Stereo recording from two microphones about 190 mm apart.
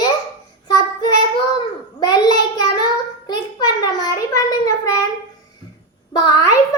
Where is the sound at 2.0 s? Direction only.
20° left (ahead or behind).